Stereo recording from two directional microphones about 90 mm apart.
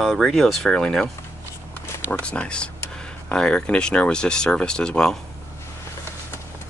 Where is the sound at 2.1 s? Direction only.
15° left (ahead or behind).